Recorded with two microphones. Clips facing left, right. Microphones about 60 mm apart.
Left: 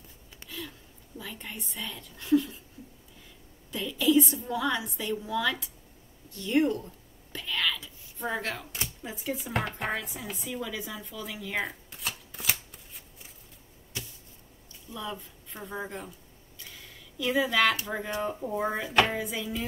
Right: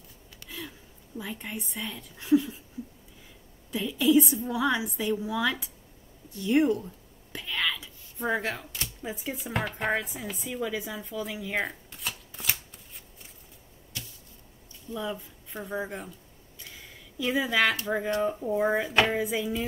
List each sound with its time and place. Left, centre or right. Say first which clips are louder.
0.5 s a sound: even; centre
1.1 s a woman's voice: right 4 dB; centre
3.7 s a woman's voice: right 2 dB; centre
7.3 s whispering: even; centre
9.0 s speech: even; centre
10.5 s shuffling cards: right 4 dB; centre
15.0 s a woman's voice: right 3 dB; centre
16.7 s a sound: right 3 dB; centre
17.8 s a woman's voice: right 5 dB; centre